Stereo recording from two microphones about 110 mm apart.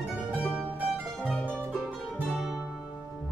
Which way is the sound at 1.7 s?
Centre (ahead or behind).